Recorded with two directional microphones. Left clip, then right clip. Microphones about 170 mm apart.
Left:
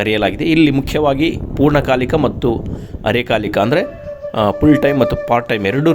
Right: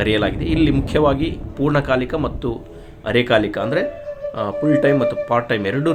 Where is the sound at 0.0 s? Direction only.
50° left (ahead or behind).